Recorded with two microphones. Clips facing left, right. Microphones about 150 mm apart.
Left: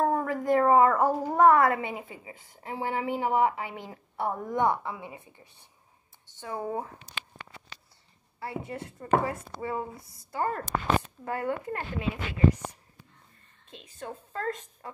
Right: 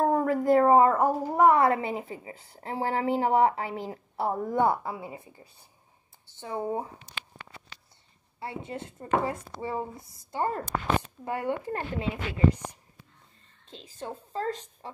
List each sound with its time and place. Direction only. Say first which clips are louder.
0.0 s speech: right 3 dB; 35° right (ahead or behind)
0.9 s speech: even; 15° right (ahead or behind)
1.6 s a woman's voice: right 1 dB; 30° right (ahead or behind)
8.4 s speech: even; 25° right (ahead or behind)
13.7 s a woman's voice: right 2 dB; 30° right (ahead or behind)